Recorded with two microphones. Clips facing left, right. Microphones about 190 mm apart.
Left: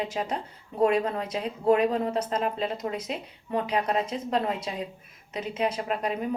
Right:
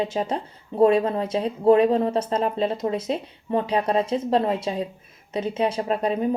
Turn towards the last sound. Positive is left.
turn(degrees=-30)  # may be behind; listen again after turning